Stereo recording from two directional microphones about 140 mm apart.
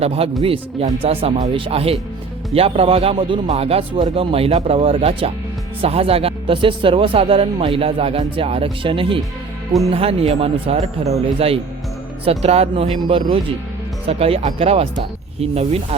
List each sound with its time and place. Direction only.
0.0 s speech: 45° right (ahead or behind)
3.4 s speech: 50° right (ahead or behind)